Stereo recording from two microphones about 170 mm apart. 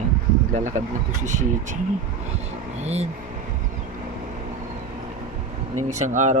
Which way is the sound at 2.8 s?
40° right (ahead or behind).